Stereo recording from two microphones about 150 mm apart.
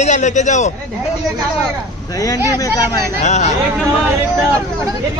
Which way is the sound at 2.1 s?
25° left (ahead or behind).